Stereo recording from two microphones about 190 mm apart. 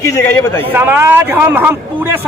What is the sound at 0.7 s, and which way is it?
Speech, 10° right (ahead or behind).